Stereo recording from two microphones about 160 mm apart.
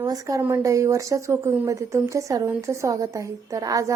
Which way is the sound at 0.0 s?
20° right (ahead or behind).